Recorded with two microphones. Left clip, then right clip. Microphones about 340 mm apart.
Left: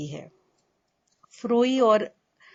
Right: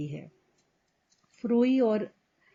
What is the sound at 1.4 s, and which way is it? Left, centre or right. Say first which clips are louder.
Speech: left 4 dB; left.